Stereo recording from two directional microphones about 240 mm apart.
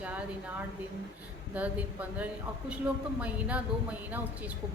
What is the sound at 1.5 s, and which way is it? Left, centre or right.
A woman's voice, centre.